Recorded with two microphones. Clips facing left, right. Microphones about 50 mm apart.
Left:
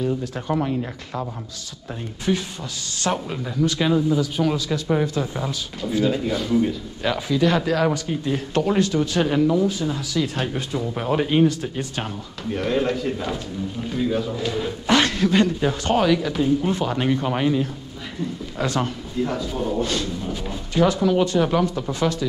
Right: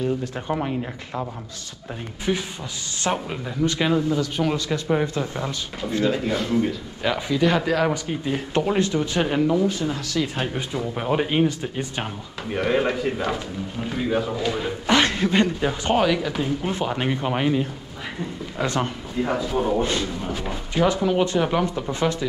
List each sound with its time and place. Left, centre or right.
0.5 s a man's voice: centre
2.3 s speech: centre
4.1 s speech: centre
4.9 s speech: centre
9.6 s speech: centre
19.2 s a man's voice: right